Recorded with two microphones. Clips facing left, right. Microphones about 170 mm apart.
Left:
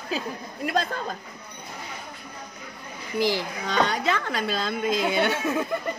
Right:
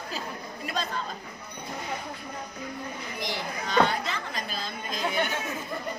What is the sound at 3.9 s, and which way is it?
Speech, 75° left (ahead or behind).